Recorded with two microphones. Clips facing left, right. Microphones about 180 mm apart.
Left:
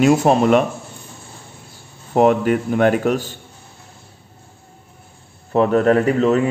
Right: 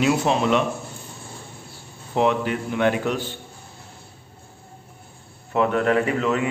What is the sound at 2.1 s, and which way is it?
A man's voice, 45° left (ahead or behind).